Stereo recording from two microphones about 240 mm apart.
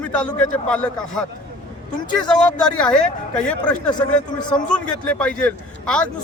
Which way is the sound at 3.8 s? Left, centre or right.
Centre.